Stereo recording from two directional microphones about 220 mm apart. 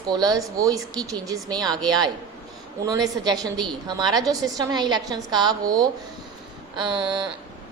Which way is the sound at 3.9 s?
20° right (ahead or behind).